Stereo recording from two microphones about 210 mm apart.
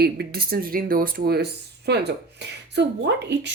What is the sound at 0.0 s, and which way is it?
A woman's voice, 45° right (ahead or behind).